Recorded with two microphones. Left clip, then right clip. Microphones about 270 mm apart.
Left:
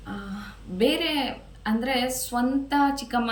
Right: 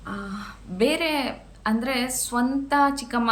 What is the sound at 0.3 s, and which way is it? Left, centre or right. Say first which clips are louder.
A woman's voice: right 1 dB; centre.